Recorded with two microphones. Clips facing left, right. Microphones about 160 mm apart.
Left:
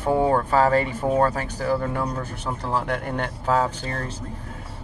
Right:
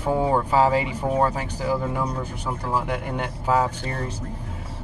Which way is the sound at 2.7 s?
10° right (ahead or behind).